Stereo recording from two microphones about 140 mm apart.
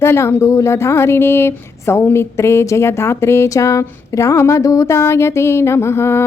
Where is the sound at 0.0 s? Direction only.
15° left (ahead or behind).